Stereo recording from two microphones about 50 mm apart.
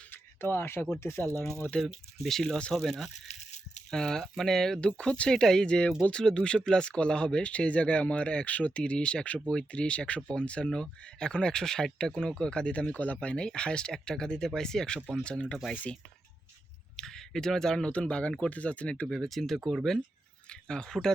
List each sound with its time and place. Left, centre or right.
0.1 s speech: left
1.8 s speech: centre
3.9 s speech: centre
4.8 s speech: centre
17.0 s speech: centre
17.9 s speech: left
19.1 s speech: centre
20.5 s speech: centre